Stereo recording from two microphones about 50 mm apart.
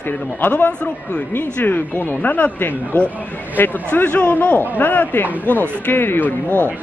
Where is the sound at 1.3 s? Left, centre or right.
Left.